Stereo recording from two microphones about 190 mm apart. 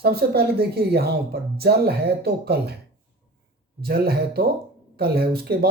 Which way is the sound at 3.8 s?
55° right (ahead or behind).